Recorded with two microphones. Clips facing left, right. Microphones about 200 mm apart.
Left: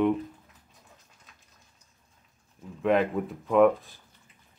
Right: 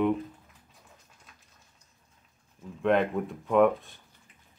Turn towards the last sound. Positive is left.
turn(degrees=0)  # may be behind; listen again after turning